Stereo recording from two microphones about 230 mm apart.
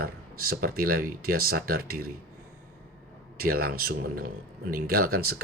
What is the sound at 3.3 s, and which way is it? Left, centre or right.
Speech, right.